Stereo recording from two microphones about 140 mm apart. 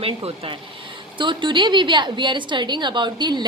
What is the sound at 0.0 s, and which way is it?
A woman's voice, 40° right (ahead or behind).